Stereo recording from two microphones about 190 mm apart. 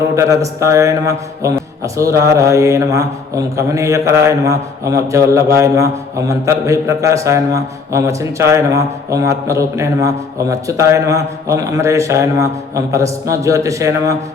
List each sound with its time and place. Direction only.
0.2 s a man's voice: 15° right (ahead or behind)